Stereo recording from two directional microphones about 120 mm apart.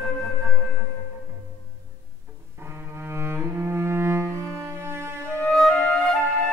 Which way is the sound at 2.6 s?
20° right (ahead or behind).